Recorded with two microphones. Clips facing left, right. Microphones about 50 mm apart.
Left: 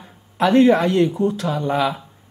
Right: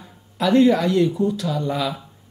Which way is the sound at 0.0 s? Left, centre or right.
Left.